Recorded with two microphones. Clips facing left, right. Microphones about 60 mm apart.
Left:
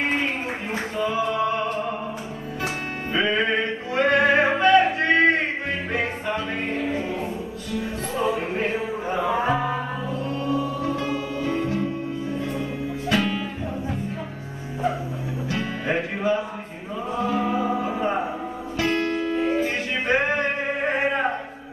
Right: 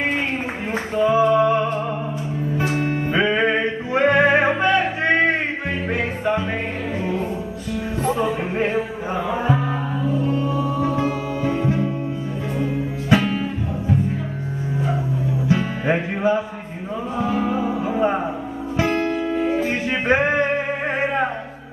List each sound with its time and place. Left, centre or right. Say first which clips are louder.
1.0 s music: right 8 dB; right
3.1 s music: right 2 dB; right
10.8 s music: right 4 dB; right
13.1 s music: right 5 dB; right
15.4 s music: right 5 dB; right
17.8 s music: right 4 dB; right